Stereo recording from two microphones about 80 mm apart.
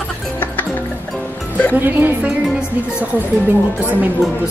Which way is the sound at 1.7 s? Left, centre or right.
Right.